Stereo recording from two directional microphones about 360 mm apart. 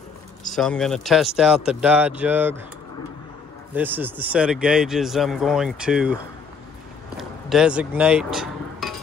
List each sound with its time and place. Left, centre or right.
0.5 s speech: centre
3.7 s speech: centre
7.2 s chink: centre